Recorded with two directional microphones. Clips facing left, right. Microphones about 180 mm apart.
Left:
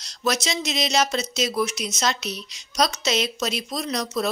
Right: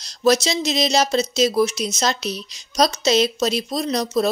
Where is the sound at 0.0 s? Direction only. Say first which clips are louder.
Right 8 dB; 30° right (ahead or behind).